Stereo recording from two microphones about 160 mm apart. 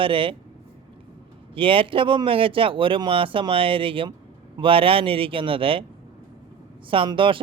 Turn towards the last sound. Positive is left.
turn(degrees=-30)  # may be behind; listen again after turning